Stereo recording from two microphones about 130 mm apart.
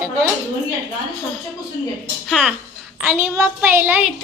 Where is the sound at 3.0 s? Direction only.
10° right (ahead or behind).